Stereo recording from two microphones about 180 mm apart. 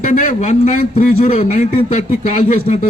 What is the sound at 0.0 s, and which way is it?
A man's voice, 45° left (ahead or behind).